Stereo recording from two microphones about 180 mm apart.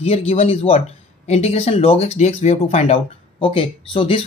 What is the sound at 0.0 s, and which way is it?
Speech, 35° left (ahead or behind).